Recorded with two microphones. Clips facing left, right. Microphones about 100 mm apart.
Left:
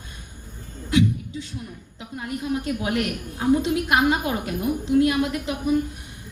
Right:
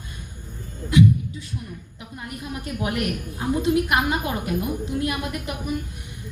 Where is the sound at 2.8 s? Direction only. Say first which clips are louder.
Left 1 dB; 25° left (ahead or behind).